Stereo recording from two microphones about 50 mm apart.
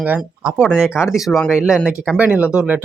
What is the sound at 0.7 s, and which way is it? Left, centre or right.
Speech, centre.